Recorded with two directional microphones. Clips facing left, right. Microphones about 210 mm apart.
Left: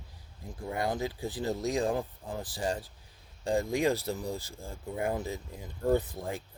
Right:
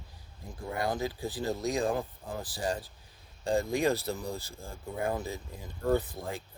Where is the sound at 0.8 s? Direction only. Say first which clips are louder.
Even; 25° left (ahead or behind).